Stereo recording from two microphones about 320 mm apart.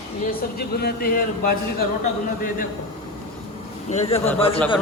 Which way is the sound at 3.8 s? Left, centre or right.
Centre.